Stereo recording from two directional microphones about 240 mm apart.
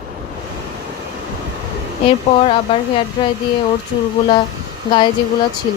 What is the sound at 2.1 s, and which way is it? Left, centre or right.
Speech, left.